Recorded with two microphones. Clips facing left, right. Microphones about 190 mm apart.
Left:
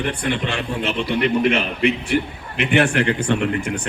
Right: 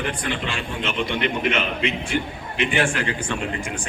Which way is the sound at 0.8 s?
35° left (ahead or behind).